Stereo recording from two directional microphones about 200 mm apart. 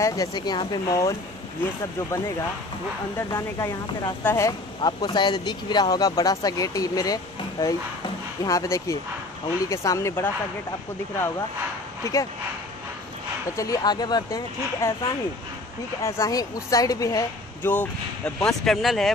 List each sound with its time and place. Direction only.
0.0 s speech: 20° left (ahead or behind)
3.2 s speech: 15° left (ahead or behind)
12.0 s speech: 15° left (ahead or behind)
13.6 s speech: 20° left (ahead or behind)
16.0 s speech: 15° left (ahead or behind)
17.6 s speech: 5° left (ahead or behind)